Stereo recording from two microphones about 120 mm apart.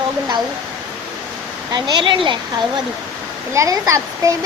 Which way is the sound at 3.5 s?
25° right (ahead or behind).